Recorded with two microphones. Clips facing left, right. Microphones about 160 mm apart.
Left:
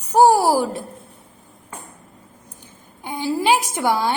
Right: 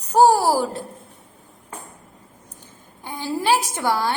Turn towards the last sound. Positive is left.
turn(degrees=15)  # may be behind; listen again after turning